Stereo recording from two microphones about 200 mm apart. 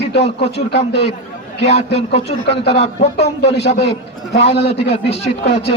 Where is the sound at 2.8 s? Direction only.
30° left (ahead or behind).